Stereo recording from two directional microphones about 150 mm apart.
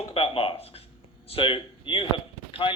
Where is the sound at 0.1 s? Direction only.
40° left (ahead or behind).